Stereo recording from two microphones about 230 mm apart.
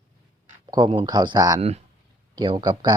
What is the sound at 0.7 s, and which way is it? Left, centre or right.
Speech, right.